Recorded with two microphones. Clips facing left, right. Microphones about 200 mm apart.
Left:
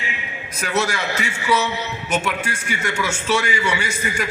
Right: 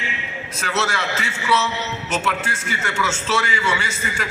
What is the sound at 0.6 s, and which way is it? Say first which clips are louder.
A man's voice: left 2 dB; 15° left (ahead or behind).